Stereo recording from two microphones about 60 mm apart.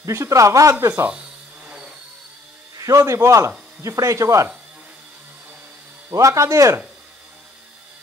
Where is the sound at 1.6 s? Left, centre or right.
Centre.